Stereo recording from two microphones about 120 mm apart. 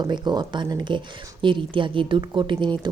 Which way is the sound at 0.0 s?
35° right (ahead or behind).